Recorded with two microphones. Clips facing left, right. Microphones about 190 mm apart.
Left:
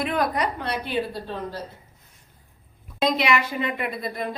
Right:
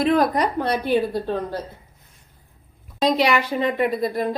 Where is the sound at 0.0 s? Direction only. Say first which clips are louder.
Right 6 dB; 35° right (ahead or behind).